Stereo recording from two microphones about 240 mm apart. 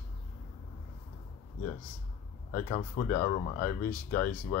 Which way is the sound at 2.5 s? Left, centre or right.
Left.